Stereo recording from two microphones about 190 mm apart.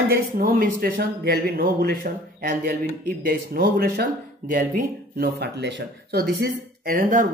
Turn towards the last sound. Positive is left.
turn(degrees=-45)  # may be behind; listen again after turning